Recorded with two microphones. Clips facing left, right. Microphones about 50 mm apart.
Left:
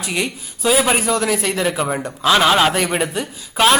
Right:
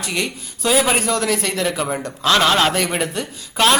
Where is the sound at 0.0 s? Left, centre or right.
Centre.